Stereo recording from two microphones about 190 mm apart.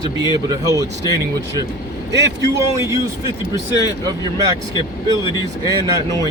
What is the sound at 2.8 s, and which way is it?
Speech, 15° right (ahead or behind).